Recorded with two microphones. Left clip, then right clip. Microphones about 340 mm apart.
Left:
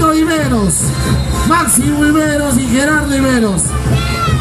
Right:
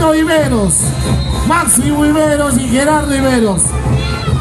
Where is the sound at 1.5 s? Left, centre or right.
Right.